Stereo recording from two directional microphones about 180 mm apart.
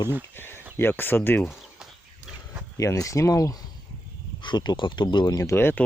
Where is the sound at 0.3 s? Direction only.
10° left (ahead or behind).